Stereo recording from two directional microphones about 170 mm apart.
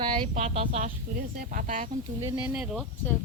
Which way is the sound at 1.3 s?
50° right (ahead or behind).